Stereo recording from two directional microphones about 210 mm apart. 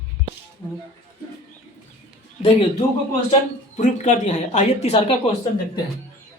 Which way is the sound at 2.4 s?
25° left (ahead or behind).